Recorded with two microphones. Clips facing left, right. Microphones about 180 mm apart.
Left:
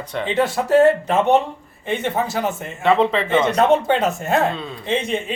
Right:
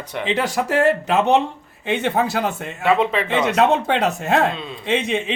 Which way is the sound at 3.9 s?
70° right (ahead or behind).